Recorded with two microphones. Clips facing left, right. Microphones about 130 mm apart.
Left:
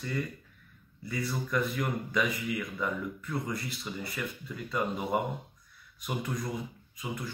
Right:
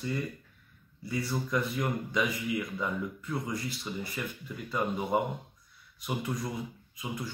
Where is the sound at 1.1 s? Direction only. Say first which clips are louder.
Right 1 dB; 20° right (ahead or behind).